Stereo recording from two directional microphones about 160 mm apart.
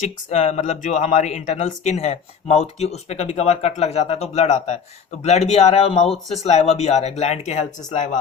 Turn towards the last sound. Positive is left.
turn(degrees=45)  # may be behind; listen again after turning